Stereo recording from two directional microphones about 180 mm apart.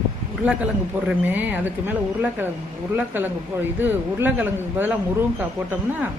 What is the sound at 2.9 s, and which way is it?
A man's voice, 10° right (ahead or behind).